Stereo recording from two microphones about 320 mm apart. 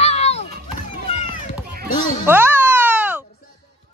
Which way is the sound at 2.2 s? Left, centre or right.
Centre.